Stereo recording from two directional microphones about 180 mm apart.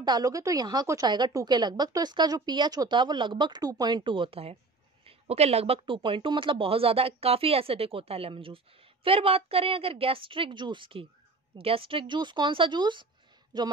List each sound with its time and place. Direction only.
0.0 s a woman's voice: 20° right (ahead or behind)